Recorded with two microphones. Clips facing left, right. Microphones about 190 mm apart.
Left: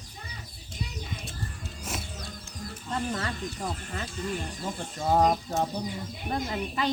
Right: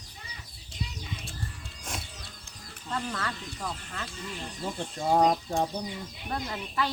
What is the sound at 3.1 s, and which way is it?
Speech, 20° left (ahead or behind).